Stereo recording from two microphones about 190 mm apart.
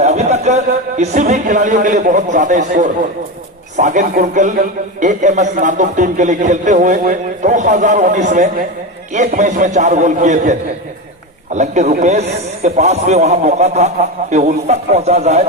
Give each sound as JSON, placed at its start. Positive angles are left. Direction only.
{"t": 0.0, "sound": "a man's voice", "side_deg": -35}